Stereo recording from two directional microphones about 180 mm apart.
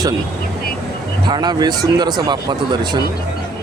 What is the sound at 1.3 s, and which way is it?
Speech, 25° right (ahead or behind).